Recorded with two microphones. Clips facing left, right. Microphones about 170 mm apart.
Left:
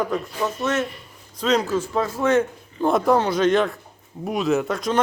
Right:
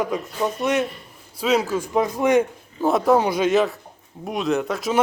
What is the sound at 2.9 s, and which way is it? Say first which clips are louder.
A man's voice: right 1 dB; centre (ahead or behind).